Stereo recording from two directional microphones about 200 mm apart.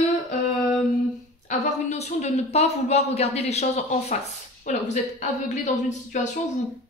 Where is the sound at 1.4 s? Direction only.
35° left (ahead or behind).